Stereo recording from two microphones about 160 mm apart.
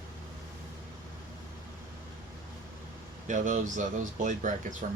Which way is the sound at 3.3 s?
50° right (ahead or behind).